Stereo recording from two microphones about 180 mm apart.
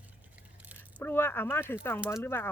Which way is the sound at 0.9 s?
10° left (ahead or behind).